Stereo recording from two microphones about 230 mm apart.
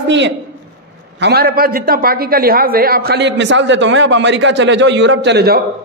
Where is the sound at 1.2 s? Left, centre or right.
Right.